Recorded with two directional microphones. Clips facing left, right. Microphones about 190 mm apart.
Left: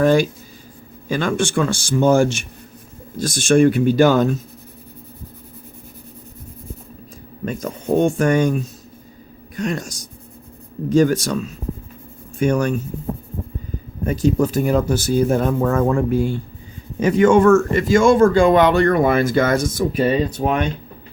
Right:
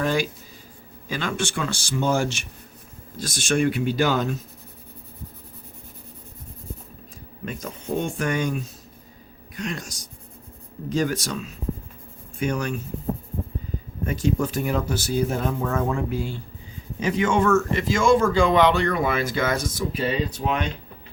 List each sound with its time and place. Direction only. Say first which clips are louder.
0.0 s speech: left 9 dB; 45° left (ahead or behind)
7.4 s speech: left 8 dB; 45° left (ahead or behind)
14.0 s speech: left 6 dB; 40° left (ahead or behind)